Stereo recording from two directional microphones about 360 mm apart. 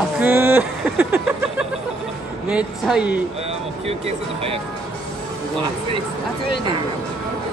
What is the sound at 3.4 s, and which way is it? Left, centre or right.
Speech, centre.